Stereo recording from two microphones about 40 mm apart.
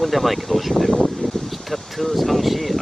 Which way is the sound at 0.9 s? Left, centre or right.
Left.